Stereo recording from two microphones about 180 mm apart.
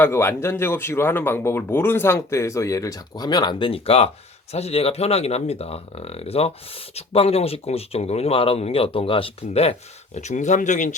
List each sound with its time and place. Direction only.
0.0 s speech: 15° left (ahead or behind); by 10.9 s 45° left (ahead or behind)